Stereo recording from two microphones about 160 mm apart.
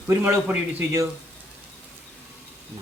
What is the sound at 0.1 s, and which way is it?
Speech, 15° right (ahead or behind).